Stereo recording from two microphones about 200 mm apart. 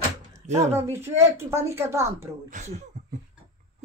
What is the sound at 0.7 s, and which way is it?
Speech, 15° right (ahead or behind).